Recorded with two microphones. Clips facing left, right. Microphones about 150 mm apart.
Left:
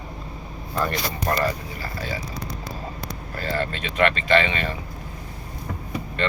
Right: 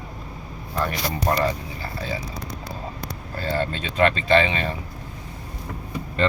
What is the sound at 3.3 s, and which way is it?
Speech, 25° right (ahead or behind).